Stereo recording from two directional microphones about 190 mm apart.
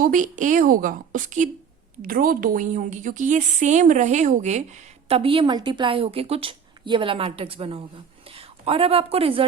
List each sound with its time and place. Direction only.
0.0 s a woman's voice: 45° right (ahead or behind)